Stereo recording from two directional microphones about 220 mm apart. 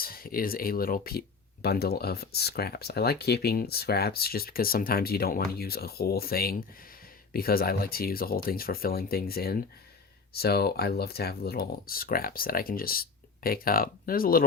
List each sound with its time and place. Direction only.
0.0 s speech: 40° left (ahead or behind)